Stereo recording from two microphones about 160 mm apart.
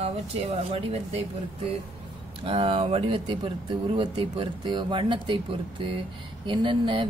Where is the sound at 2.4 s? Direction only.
35° right (ahead or behind).